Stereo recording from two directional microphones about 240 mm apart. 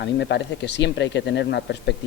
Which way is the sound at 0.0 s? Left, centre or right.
Left.